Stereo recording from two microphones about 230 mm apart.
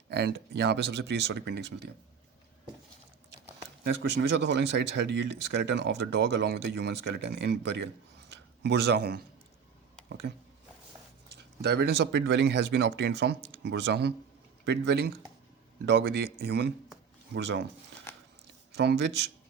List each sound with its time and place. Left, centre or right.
0.1 s speech: right
4.4 s speech: right
11.6 s speech: right
18.4 s a sound: right